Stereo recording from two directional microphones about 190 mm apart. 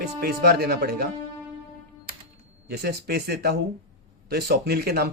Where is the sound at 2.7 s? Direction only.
55° right (ahead or behind).